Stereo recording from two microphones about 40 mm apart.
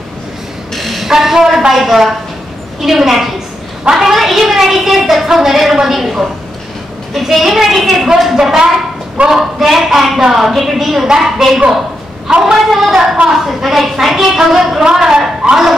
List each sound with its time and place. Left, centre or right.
0.7 s a sound: centre
1.7 s a woman's voice: centre
12.3 s a woman's voice: right
12.6 s a woman's voice: centre